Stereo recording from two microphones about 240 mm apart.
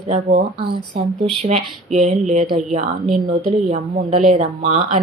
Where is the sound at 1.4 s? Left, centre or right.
Right.